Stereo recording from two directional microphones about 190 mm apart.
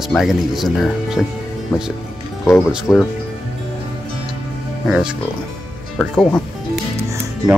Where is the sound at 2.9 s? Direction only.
Centre (ahead or behind).